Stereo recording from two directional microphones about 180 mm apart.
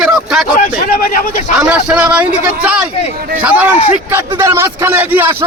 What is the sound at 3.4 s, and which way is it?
A man's voice, 5° right (ahead or behind).